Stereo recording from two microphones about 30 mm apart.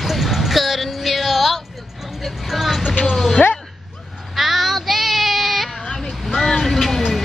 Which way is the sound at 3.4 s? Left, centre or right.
Left.